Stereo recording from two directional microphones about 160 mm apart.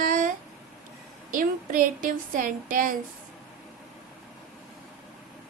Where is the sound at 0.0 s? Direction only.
55° right (ahead or behind).